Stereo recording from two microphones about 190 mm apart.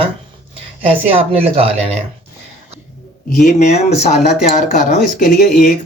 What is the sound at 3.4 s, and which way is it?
Speech, 40° left (ahead or behind).